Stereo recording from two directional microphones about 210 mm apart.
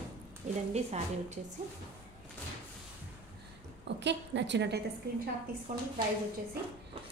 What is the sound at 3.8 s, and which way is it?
A woman's voice, 55° right (ahead or behind).